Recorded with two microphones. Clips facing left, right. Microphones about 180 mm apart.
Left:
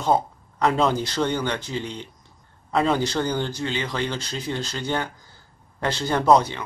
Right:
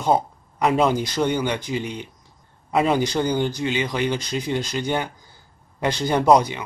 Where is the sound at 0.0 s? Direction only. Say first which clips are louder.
Right 1 dB; 10° right (ahead or behind).